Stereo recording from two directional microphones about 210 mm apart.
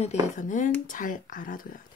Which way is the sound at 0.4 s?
35° left (ahead or behind).